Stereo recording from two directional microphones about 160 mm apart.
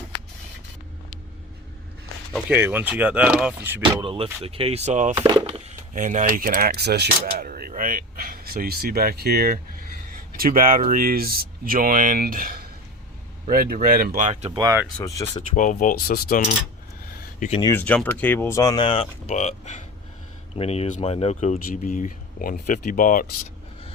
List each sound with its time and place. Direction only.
2.5 s speech: 10° right (ahead or behind)
4.0 s speech: 35° right (ahead or behind)
5.1 s speech: 30° right (ahead or behind)
5.9 s speech: 55° right (ahead or behind)
14.3 s speech: 45° right (ahead or behind)
14.6 s speech: 20° right (ahead or behind)
14.9 s speech: 15° left (ahead or behind)
15.4 s speech: 50° left (ahead or behind)
17.6 s speech: 15° left (ahead or behind); by 19.0 s 30° left (ahead or behind)
19.3 s speech: 45° left (ahead or behind)